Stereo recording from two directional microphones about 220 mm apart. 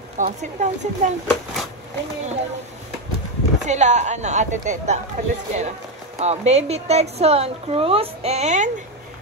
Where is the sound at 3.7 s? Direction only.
30° right (ahead or behind).